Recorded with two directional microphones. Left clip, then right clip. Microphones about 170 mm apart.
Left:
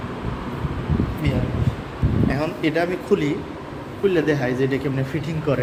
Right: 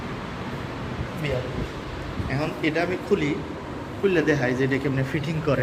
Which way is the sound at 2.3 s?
40° left (ahead or behind).